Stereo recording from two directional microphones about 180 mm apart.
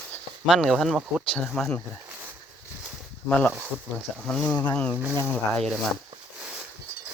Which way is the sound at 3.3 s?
10° left (ahead or behind).